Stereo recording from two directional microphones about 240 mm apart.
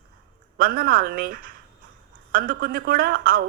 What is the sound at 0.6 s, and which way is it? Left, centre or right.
Speech, right.